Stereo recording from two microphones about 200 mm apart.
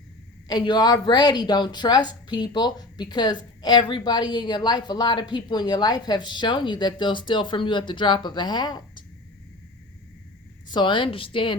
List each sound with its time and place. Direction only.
0.4 s a woman's voice: 20° left (ahead or behind)
10.7 s a woman's voice: 25° left (ahead or behind)